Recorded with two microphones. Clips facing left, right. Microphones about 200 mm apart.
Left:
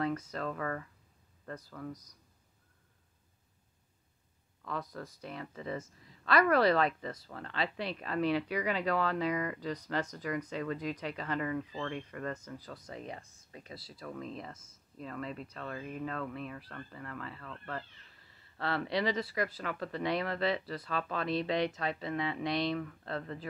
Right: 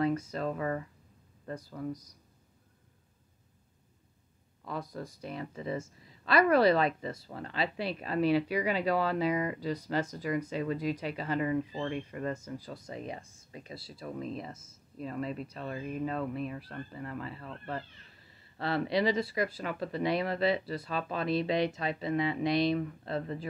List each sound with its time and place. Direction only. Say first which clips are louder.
0.3 s speech: right 4 dB; 20° right (ahead or behind)
4.6 s speech: right 2 dB; 10° right (ahead or behind)
5.4 s speech: right 3 dB; 25° right (ahead or behind)
6.2 s speech: right 3 dB; 10° right (ahead or behind)
9.3 s speech: right 3 dB; 25° right (ahead or behind)
9.6 s speech: right 3 dB; 10° right (ahead or behind)
11.4 s speech: right 4 dB; 20° right (ahead or behind)
14.3 s speech: right 4 dB; 10° right (ahead or behind)
15.0 s speech: right 5 dB; 15° right (ahead or behind)
18.6 s speech: right 4 dB; 15° right (ahead or behind)